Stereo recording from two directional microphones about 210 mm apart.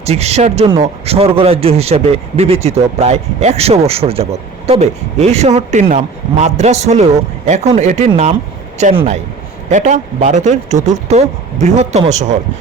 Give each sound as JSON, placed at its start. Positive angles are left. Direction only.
{"t": 0.0, "sound": "a man's voice", "side_deg": -30}